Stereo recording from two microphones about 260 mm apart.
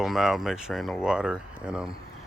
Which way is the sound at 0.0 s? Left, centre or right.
Centre.